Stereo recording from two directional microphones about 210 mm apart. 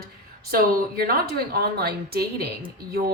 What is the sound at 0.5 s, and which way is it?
A woman's voice, 45° right (ahead or behind).